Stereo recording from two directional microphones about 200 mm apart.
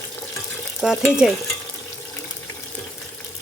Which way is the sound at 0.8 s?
5° right (ahead or behind).